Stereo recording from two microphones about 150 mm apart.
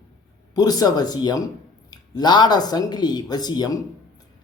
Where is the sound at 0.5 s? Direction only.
25° left (ahead or behind).